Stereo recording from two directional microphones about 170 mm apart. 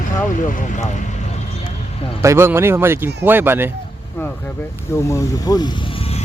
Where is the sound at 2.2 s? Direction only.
15° right (ahead or behind).